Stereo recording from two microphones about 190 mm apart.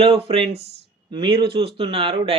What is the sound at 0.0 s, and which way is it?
Speech, 30° right (ahead or behind).